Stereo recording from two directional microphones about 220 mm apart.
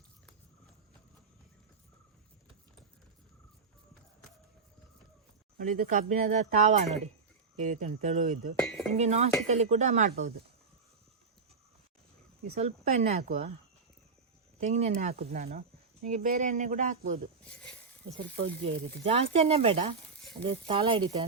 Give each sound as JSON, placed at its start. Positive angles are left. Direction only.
{"t": 5.5, "sound": "speech", "side_deg": -40}
{"t": 8.5, "sound": "speech", "side_deg": 5}
{"t": 9.0, "sound": "speech", "side_deg": -30}
{"t": 12.5, "sound": "speech", "side_deg": -30}
{"t": 14.6, "sound": "speech", "side_deg": -30}
{"t": 15.2, "sound": "speech", "side_deg": -40}
{"t": 17.5, "sound": "speech", "side_deg": 5}
{"t": 18.3, "sound": "speech", "side_deg": -25}